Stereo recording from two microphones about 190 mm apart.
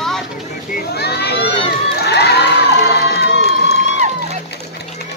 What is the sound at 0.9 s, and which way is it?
Children playing, 60° left (ahead or behind).